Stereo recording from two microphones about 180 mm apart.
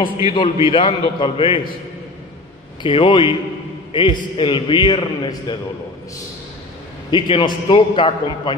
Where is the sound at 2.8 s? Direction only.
25° left (ahead or behind).